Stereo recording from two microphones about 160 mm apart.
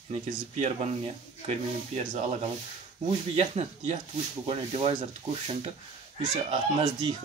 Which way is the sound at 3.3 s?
40° right (ahead or behind).